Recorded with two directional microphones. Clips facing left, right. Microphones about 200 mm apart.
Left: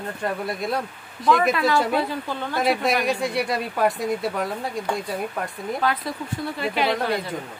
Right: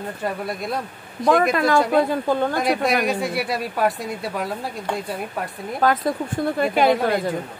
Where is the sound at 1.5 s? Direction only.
50° right (ahead or behind).